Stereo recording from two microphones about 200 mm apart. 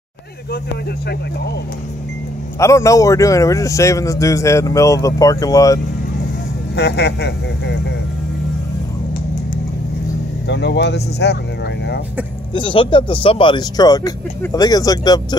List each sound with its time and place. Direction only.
2.6 s a man's voice: 15° left (ahead or behind)
6.7 s speech: 55° left (ahead or behind)
10.5 s speech: 60° left (ahead or behind)
12.5 s speech: 25° left (ahead or behind)